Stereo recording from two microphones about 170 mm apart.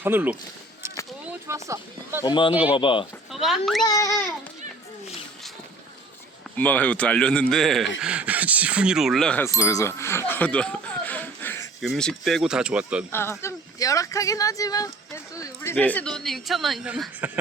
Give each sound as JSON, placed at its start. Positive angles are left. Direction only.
{"t": 0.0, "sound": "speech", "side_deg": -10}
{"t": 2.2, "sound": "speech", "side_deg": 30}
{"t": 3.4, "sound": "speech", "side_deg": 0}
{"t": 3.8, "sound": "speech", "side_deg": 20}
{"t": 6.6, "sound": "a man's voice", "side_deg": 10}
{"t": 9.6, "sound": "a sound", "side_deg": 20}
{"t": 11.8, "sound": "speech", "side_deg": 0}
{"t": 13.1, "sound": "a man's voice", "side_deg": 15}